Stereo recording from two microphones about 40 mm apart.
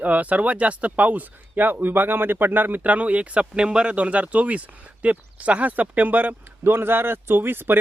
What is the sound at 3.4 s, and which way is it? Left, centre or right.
Speech, right.